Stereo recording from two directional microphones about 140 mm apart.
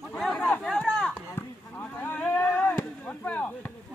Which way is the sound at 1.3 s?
15° left (ahead or behind).